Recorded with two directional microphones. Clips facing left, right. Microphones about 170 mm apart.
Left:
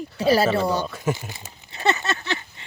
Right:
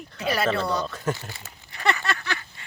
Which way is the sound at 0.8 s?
10° left (ahead or behind).